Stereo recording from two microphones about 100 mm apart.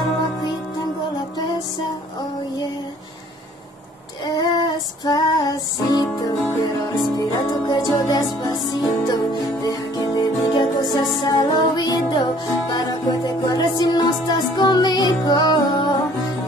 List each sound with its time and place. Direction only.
4.4 s female singing: 40° left (ahead or behind)
5.9 s music: 45° left (ahead or behind)